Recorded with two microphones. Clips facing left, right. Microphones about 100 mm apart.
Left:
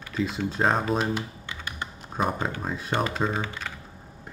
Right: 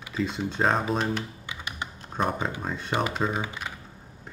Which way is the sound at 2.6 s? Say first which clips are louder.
Left 1 dB; 5° left (ahead or behind).